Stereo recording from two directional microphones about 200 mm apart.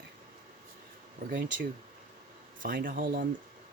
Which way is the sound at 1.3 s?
40° right (ahead or behind).